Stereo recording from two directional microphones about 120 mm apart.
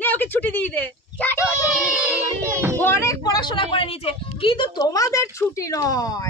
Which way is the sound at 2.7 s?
20° left (ahead or behind).